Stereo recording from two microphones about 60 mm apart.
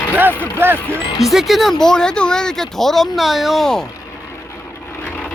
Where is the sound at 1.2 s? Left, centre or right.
Centre.